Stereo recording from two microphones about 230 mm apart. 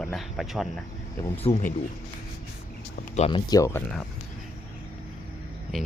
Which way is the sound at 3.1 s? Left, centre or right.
Left.